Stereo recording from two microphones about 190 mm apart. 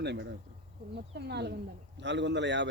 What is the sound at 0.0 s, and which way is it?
A woman's voice, 65° right (ahead or behind).